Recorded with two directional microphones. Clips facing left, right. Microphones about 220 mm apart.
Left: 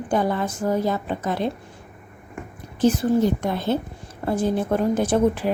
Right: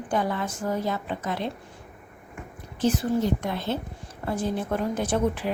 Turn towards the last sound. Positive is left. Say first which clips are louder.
# left 5 dB
turn(degrees=40)  # may be behind; listen again after turning